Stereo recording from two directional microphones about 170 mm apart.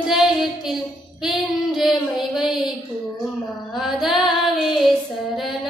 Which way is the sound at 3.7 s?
Centre (ahead or behind).